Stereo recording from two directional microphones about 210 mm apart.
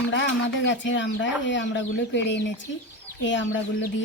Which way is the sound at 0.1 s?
60° left (ahead or behind).